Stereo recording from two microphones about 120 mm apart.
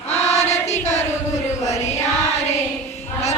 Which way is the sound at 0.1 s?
70° left (ahead or behind).